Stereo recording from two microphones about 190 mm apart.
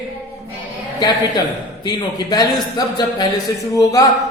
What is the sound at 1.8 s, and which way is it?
A man's voice, 20° left (ahead or behind).